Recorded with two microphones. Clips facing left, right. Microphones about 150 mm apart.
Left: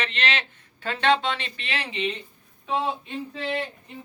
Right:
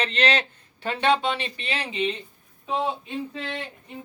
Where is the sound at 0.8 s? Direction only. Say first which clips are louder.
Even; 15° right (ahead or behind).